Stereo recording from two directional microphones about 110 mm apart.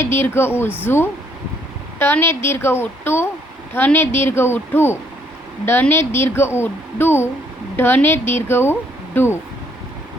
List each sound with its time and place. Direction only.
0.0 s a woman's voice: 20° left (ahead or behind)